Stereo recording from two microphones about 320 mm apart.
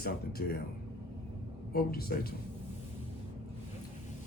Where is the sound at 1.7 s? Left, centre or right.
Left.